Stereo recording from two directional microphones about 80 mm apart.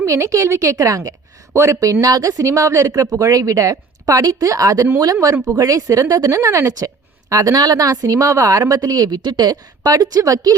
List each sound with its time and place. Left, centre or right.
0.0 s a woman's voice: right